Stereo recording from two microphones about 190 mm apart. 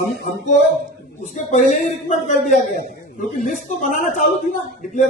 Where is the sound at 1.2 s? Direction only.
40° left (ahead or behind).